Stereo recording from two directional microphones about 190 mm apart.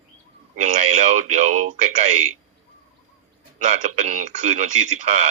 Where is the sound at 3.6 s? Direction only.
40° right (ahead or behind).